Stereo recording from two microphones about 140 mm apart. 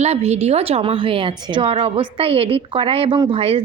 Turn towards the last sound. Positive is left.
turn(degrees=-45)  # may be behind; listen again after turning